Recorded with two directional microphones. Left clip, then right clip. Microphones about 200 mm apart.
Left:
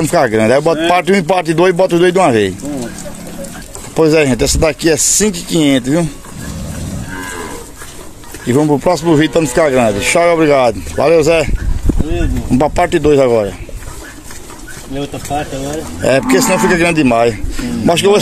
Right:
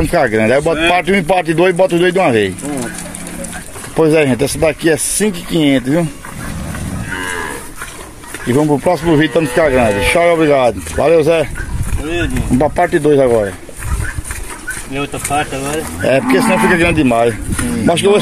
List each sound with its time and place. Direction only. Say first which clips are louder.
0.0 s speech: left 1 dB; 10° left (ahead or behind)
3.9 s speech: left 1 dB; centre (ahead or behind)
8.5 s speech: left 1 dB; 5° left (ahead or behind)
15.0 s speech: right 2 dB; 5° left (ahead or behind)